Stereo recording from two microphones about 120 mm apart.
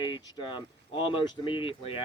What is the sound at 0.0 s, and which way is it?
Speech, 35° left (ahead or behind).